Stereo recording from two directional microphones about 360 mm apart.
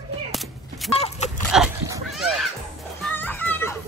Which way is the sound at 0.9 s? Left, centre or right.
Centre.